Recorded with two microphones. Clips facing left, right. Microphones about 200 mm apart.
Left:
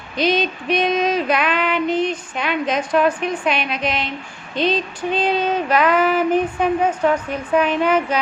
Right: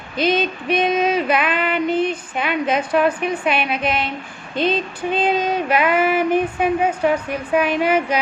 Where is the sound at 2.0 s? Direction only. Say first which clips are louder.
Right 1 dB; 55° right (ahead or behind).